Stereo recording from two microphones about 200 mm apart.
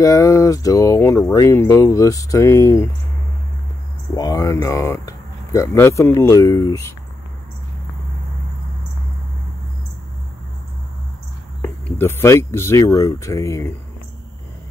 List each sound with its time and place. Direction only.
0.0 s speech: 15° left (ahead or behind)
4.1 s speech: 20° left (ahead or behind)
11.6 s speech: 10° left (ahead or behind)